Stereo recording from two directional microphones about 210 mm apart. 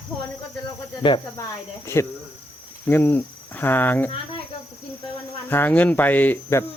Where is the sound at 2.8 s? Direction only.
10° left (ahead or behind).